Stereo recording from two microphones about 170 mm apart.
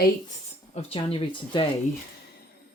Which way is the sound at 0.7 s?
30° left (ahead or behind).